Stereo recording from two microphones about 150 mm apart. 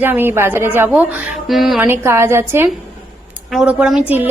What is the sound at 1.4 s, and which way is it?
Speech, centre (ahead or behind).